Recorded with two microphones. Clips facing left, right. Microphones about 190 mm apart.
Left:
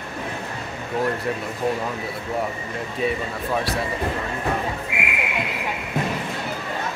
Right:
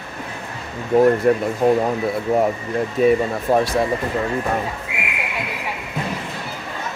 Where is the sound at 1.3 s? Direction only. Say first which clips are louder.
Right 10 dB; 50° right (ahead or behind).